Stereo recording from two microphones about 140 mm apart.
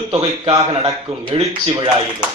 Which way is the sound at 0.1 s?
40° right (ahead or behind).